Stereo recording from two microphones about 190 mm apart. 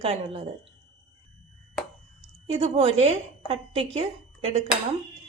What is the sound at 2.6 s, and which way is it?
A woman's voice, 35° right (ahead or behind).